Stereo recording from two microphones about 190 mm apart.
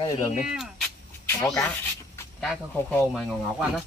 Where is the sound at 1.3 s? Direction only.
5° left (ahead or behind).